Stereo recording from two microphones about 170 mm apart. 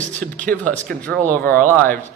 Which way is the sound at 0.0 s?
10° left (ahead or behind).